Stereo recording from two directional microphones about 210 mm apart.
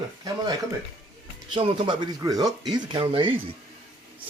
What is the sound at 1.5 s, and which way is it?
Speech, 25° right (ahead or behind).